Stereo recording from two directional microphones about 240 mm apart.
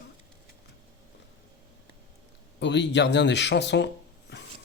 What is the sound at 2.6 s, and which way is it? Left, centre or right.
Speech, left.